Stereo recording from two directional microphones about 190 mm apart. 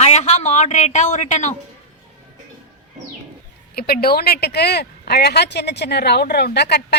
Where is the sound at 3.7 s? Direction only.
55° left (ahead or behind).